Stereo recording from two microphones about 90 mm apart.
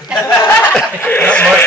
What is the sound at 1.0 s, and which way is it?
Speech, 20° left (ahead or behind).